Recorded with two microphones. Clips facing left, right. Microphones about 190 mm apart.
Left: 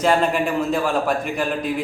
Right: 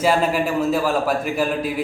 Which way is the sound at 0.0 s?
5° right (ahead or behind).